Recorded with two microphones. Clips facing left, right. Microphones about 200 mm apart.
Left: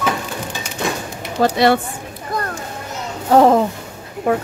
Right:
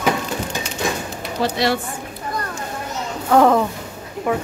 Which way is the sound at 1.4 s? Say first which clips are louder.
Left 6 dB; 55° left (ahead or behind).